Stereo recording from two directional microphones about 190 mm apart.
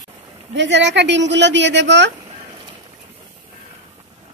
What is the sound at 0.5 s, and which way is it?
Speech, 70° right (ahead or behind).